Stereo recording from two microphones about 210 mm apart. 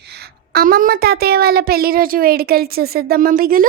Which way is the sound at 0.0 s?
50° right (ahead or behind).